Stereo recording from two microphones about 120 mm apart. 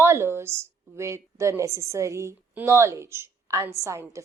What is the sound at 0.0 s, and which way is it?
A woman's voice, 20° right (ahead or behind).